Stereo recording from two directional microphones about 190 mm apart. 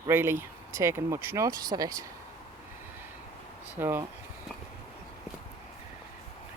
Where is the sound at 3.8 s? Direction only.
10° right (ahead or behind).